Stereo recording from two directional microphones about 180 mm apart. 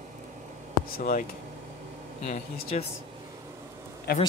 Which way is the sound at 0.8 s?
55° left (ahead or behind).